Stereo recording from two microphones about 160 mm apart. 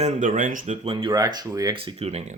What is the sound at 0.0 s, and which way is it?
Speech, 50° right (ahead or behind).